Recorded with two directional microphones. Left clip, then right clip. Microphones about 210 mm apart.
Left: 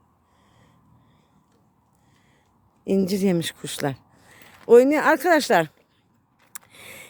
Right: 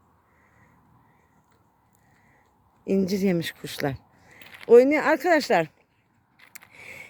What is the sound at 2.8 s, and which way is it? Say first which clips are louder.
Speech: left 2 dB; 10° left (ahead or behind).